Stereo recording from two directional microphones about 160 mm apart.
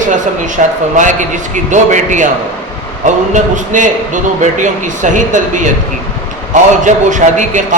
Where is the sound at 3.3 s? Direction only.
50° right (ahead or behind).